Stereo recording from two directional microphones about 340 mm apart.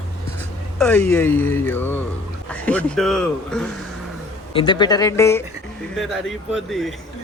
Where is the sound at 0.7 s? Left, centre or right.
Centre.